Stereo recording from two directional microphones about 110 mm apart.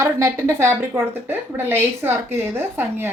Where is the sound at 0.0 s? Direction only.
25° right (ahead or behind).